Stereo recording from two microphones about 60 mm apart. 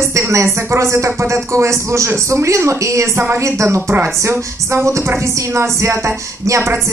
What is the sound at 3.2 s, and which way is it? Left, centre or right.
Music, right.